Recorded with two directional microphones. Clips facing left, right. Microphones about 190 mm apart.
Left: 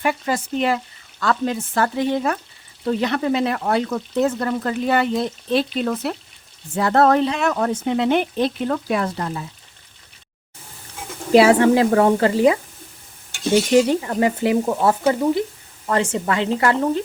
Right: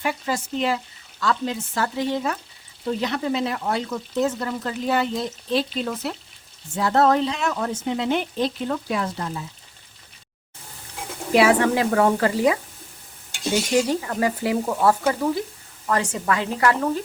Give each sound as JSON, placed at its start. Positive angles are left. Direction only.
{"t": 0.0, "sound": "speech", "side_deg": 55}
{"t": 11.3, "sound": "speech", "side_deg": 30}
{"t": 14.0, "sound": "speech", "side_deg": 25}